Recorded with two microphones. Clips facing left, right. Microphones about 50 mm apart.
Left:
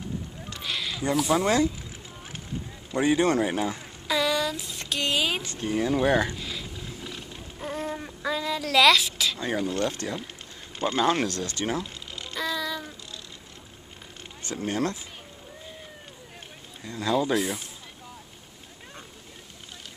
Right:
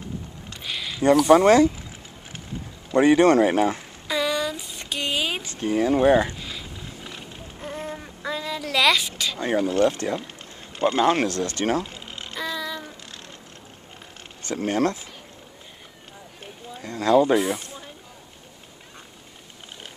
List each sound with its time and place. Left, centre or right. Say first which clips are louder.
0.5 s a sound: even; centre
1.3 s speech: right 8 dB; right
3.0 s speech: right 7 dB; right
4.1 s a sound: right 1 dB; centre
5.6 s speech: right 6 dB; right
6.2 s a sound: even; centre
9.4 s speech: right 9 dB; right
10.8 s speech: right 5 dB; centre
11.2 s speech: right 5 dB; right
11.8 s a sound: right 2 dB; right
12.3 s child singing: even; centre
14.5 s speech: right 5 dB; right
16.8 s speech: right 5 dB; right
17.4 s speech: right 4 dB; centre